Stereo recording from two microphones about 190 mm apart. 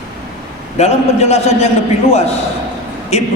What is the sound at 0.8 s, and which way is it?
Speech, 35° left (ahead or behind).